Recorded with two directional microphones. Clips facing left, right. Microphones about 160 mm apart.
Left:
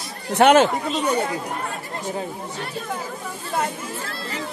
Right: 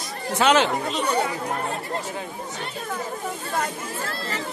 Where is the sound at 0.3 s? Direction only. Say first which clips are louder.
Left 5 dB; 55° left (ahead or behind).